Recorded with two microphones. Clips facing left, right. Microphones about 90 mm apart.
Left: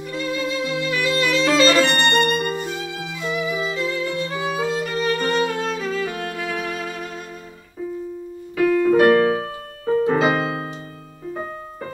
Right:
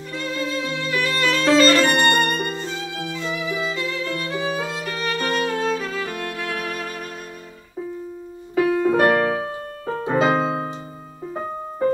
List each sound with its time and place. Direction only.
0.1 s violin: centre (ahead or behind)
2.5 s violin: 10° left (ahead or behind)
4.7 s music: centre (ahead or behind)
8.5 s keyboard: 30° right (ahead or behind)
10.0 s music: 25° right (ahead or behind)